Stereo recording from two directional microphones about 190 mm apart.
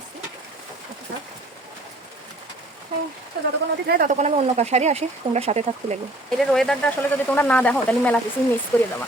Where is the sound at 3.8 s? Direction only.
45° right (ahead or behind).